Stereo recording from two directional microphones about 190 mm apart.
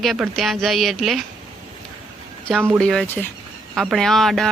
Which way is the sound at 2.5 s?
5° right (ahead or behind).